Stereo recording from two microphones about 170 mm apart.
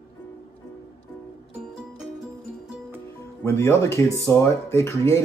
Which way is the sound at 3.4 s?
15° left (ahead or behind).